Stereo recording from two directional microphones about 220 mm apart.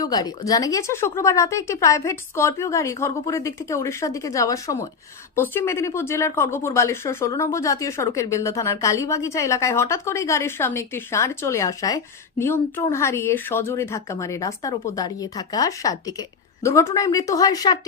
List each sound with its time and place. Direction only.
0.0 s speech: 15° left (ahead or behind)